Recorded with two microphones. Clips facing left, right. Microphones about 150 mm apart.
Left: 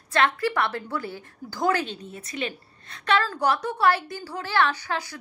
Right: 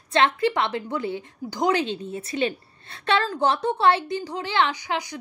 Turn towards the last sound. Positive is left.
turn(degrees=-15)  # may be behind; listen again after turning